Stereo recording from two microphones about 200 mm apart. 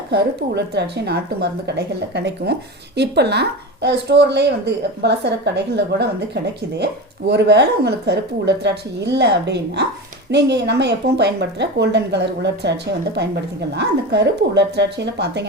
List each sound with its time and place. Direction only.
0.1 s speech: 55° right (ahead or behind)